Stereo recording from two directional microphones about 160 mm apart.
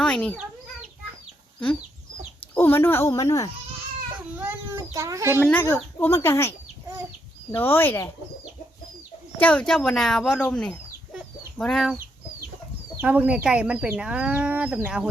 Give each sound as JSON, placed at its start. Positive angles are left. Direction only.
{"t": 0.0, "sound": "a child's voice", "side_deg": 5}
{"t": 2.6, "sound": "speech", "side_deg": 15}
{"t": 4.4, "sound": "a child's voice", "side_deg": -15}
{"t": 5.7, "sound": "speech", "side_deg": 15}
{"t": 7.5, "sound": "speech", "side_deg": 15}
{"t": 9.4, "sound": "speech", "side_deg": 10}
{"t": 13.0, "sound": "speech", "side_deg": -10}